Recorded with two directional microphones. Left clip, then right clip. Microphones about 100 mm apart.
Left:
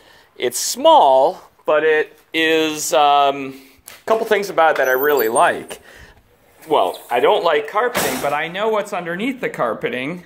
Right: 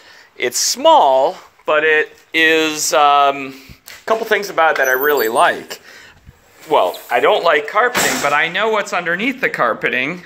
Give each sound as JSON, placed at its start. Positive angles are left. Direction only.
{"t": 0.4, "sound": "speech", "side_deg": 40}
{"t": 2.3, "sound": "speech", "side_deg": 30}
{"t": 4.2, "sound": "speech", "side_deg": 75}
{"t": 4.7, "sound": "speech", "side_deg": 45}
{"t": 5.1, "sound": "speech", "side_deg": 20}
{"t": 8.2, "sound": "speech", "side_deg": 10}